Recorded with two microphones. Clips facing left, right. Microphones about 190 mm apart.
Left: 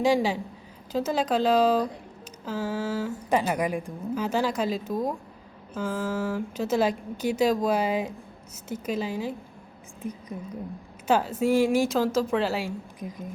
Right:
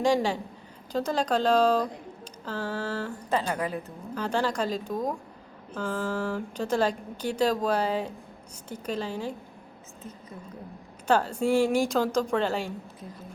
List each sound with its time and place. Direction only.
0.0 s a woman's voice: 5° left (ahead or behind)
10.0 s a sound: 15° left (ahead or behind)
11.1 s a woman's voice: 5° left (ahead or behind)